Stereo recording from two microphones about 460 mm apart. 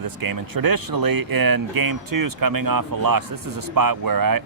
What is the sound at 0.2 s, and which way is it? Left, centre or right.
Speech, right.